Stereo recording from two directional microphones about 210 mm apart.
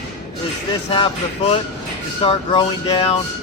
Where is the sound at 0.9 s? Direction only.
25° left (ahead or behind).